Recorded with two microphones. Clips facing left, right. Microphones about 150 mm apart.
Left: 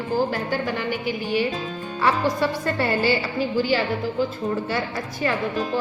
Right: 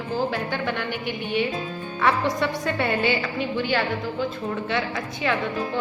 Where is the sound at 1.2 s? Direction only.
5° left (ahead or behind).